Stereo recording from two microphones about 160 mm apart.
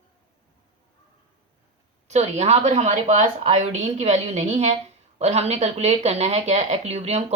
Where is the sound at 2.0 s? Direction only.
45° right (ahead or behind).